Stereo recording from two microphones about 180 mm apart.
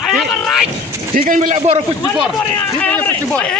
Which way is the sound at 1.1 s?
50° right (ahead or behind).